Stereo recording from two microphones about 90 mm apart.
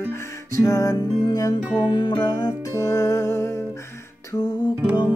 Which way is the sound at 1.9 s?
60° left (ahead or behind).